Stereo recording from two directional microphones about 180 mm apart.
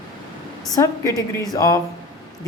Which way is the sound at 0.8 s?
15° left (ahead or behind).